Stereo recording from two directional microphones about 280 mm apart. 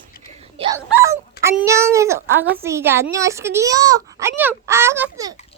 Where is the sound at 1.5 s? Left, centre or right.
Centre.